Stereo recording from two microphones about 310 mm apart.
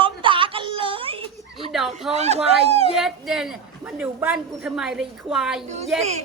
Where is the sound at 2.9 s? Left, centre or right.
Centre.